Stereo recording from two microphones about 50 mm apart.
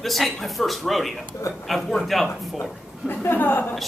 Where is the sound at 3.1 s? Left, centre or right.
Left.